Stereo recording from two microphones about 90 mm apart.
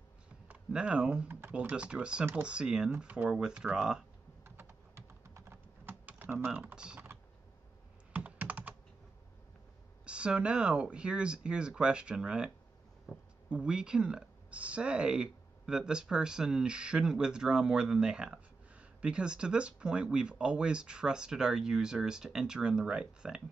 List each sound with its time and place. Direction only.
0.7 s speech: 10° right (ahead or behind)
4.5 s typing: 25° right (ahead or behind); by 7.0 s 10° right (ahead or behind)
8.1 s computer keyboard: 20° right (ahead or behind)
10.0 s speech: 10° right (ahead or behind)
13.5 s speech: 10° right (ahead or behind)